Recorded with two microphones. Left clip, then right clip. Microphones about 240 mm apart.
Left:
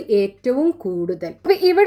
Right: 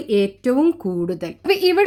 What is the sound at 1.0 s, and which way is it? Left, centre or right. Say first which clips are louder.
Speech: even; right.